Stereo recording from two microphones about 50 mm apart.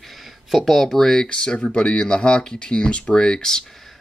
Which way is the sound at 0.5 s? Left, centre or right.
Centre.